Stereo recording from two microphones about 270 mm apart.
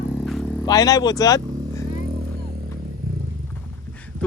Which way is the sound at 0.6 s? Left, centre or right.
Centre.